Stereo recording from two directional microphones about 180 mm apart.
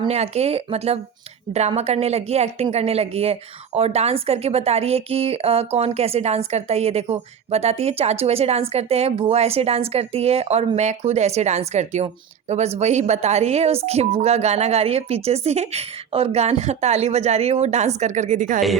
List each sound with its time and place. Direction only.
0.1 s a woman's voice: 35° right (ahead or behind)